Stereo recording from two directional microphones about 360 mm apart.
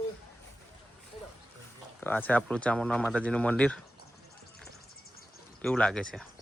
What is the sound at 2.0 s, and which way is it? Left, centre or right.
Speech, centre.